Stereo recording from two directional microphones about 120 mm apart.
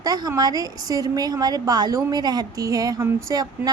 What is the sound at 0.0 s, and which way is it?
A woman's voice, 30° right (ahead or behind).